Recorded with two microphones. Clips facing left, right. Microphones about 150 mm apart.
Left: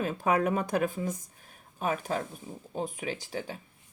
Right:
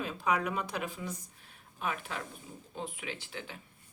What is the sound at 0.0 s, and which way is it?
Speech, 45° left (ahead or behind).